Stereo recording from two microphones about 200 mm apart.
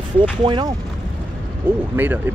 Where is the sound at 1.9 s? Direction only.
10° right (ahead or behind).